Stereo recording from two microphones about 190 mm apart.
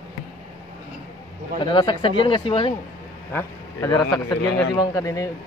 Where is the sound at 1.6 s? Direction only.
25° left (ahead or behind).